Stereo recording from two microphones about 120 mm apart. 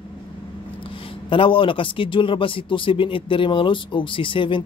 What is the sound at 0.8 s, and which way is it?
Speech, 45° left (ahead or behind).